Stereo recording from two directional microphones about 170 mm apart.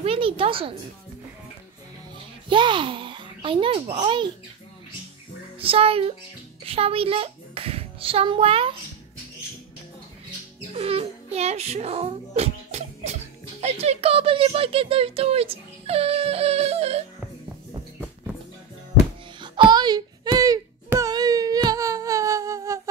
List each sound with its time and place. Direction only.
0.0 s a sound: 35° right (ahead or behind)
2.5 s a child's voice: 30° right (ahead or behind)
5.6 s a woman's voice: 35° right (ahead or behind)
10.7 s a child's voice: 35° right (ahead or behind)
19.4 s wail: 30° right (ahead or behind)